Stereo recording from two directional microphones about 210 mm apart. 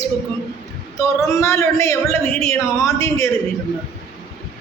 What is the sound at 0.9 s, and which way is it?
A man's voice, 15° left (ahead or behind).